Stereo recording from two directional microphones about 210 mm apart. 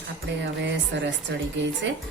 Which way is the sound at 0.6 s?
55° right (ahead or behind).